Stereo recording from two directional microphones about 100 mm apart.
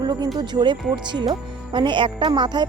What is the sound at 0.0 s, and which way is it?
Music, 45° right (ahead or behind).